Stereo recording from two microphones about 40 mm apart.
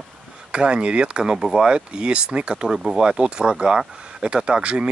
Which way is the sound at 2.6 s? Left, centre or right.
Centre.